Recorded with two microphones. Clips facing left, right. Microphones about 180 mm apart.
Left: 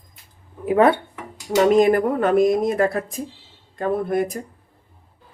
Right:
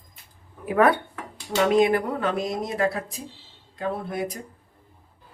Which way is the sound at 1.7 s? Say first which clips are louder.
Left 3 dB; 45° left (ahead or behind).